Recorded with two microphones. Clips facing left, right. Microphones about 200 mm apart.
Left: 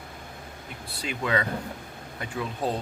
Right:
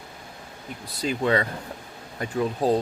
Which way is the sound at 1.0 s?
35° right (ahead or behind).